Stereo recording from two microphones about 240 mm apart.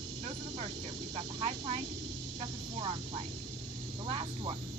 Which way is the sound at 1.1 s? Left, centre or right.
Right.